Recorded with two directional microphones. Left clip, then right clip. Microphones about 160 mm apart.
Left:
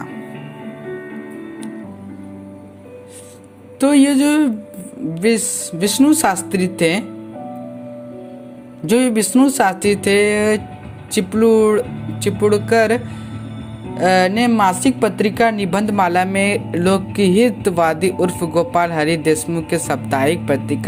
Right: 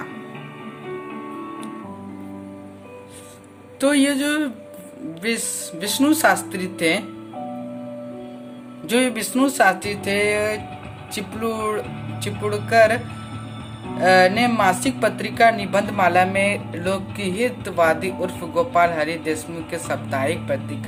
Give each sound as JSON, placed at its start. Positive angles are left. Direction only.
{"t": 3.8, "sound": "speech", "side_deg": 30}
{"t": 8.9, "sound": "speech", "side_deg": 40}